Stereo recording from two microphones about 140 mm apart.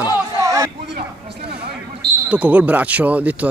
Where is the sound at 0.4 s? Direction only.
25° right (ahead or behind).